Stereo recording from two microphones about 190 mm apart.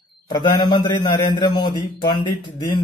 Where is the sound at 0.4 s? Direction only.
25° left (ahead or behind).